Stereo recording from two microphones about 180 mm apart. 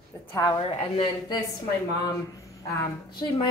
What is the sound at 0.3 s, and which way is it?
Speech, 20° left (ahead or behind).